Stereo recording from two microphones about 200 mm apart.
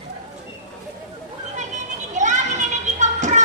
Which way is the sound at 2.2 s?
35° right (ahead or behind).